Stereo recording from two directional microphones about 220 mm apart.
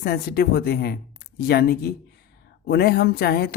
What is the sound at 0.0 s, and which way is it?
Speech, 45° left (ahead or behind).